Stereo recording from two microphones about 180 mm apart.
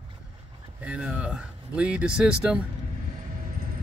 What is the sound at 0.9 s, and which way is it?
Speech, 5° right (ahead or behind).